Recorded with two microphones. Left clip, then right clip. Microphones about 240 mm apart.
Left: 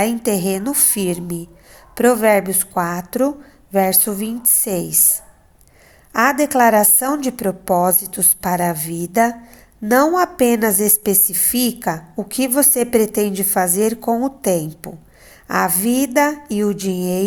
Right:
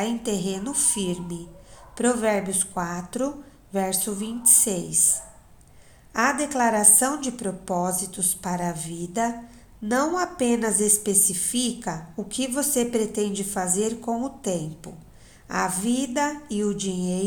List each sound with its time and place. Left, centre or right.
0.0 s a woman's voice: left